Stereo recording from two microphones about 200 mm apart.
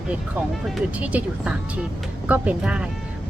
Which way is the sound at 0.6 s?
5° right (ahead or behind).